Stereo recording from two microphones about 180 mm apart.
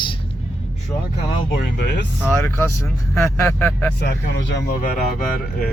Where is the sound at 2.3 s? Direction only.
15° left (ahead or behind).